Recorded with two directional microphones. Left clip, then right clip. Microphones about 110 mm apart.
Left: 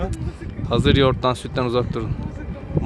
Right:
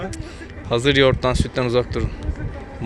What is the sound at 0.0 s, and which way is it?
Speech, 25° left (ahead or behind).